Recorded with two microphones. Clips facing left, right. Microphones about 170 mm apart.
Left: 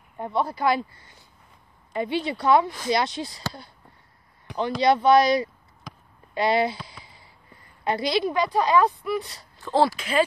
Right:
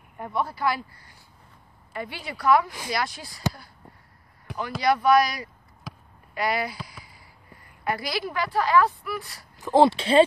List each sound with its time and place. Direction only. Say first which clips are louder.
0.2 s a woman's voice: left 3 dB; 25° left (ahead or behind)
4.5 s a sound: left 5 dB; 5° right (ahead or behind)
4.8 s a woman's voice: left 2 dB; 25° left (ahead or behind)
5.9 s basketball bounce: right 2 dB; 5° right (ahead or behind)
6.3 s a woman's voice: left 5 dB; 25° left (ahead or behind)
7.8 s a woman's voice: left 5 dB; 20° left (ahead or behind)
9.6 s speech: right 3 dB; 20° right (ahead or behind)
9.9 s speech: right 5 dB; 30° right (ahead or behind)